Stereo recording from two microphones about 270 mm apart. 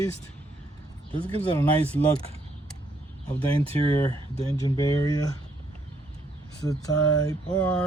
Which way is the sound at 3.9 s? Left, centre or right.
Centre.